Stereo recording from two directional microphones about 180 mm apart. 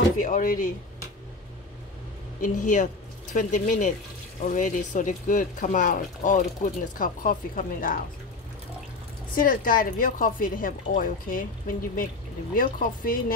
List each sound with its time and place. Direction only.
0.2 s speech: 50° left (ahead or behind)
2.4 s speech: 45° left (ahead or behind)
9.3 s speech: 50° left (ahead or behind)